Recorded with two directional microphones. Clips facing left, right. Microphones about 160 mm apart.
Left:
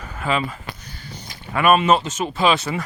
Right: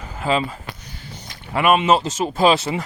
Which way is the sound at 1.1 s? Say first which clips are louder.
Right 1 dB; 20° right (ahead or behind).